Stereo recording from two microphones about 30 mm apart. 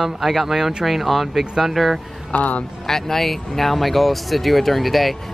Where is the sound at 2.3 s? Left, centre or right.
Left.